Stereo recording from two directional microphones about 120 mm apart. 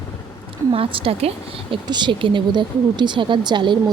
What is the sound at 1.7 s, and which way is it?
Speech, 40° right (ahead or behind).